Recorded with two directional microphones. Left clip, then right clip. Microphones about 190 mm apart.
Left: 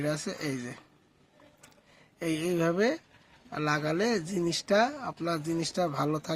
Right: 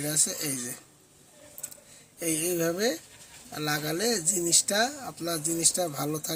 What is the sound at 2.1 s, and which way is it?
Speech, 30° left (ahead or behind).